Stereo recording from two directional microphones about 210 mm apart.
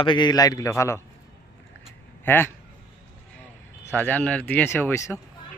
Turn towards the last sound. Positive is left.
turn(degrees=10)  # may be behind; listen again after turning